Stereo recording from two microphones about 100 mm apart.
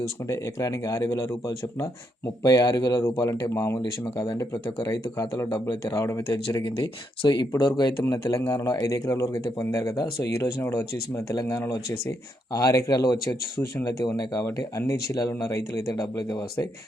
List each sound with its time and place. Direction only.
0.3 s speech: 30° left (ahead or behind)
2.4 s speech: 40° left (ahead or behind)
6.6 s speech: 50° left (ahead or behind)